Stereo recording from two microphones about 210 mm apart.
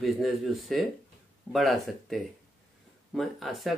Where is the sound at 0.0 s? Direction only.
Centre (ahead or behind).